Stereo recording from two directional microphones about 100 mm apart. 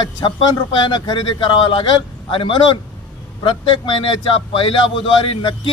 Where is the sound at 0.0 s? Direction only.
55° left (ahead or behind).